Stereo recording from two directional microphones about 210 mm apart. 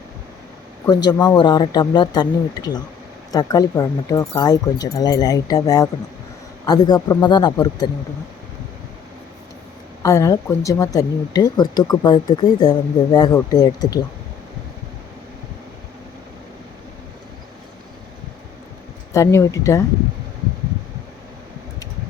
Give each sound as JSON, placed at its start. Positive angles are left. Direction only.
{"t": 0.9, "sound": "speech", "side_deg": 20}
{"t": 10.0, "sound": "speech", "side_deg": 15}
{"t": 19.1, "sound": "speech", "side_deg": 15}